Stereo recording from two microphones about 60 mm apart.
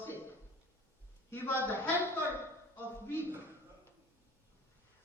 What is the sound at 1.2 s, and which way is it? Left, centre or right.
Speech, left.